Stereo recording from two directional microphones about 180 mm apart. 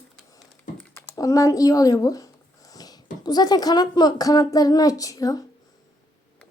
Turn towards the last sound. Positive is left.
turn(degrees=20)  # may be behind; listen again after turning